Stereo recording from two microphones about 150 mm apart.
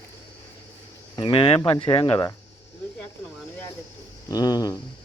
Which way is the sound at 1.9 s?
20° left (ahead or behind).